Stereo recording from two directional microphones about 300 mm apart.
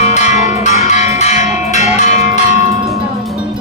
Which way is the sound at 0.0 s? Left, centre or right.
Left.